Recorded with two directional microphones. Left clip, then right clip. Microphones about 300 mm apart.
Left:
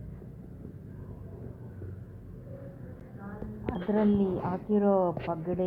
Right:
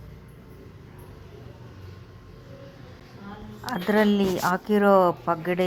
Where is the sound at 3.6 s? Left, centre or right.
Right.